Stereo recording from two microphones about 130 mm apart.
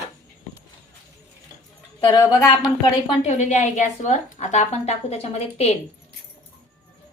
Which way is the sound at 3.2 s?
60° left (ahead or behind).